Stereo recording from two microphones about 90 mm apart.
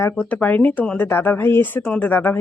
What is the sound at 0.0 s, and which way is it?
Speech, 20° left (ahead or behind).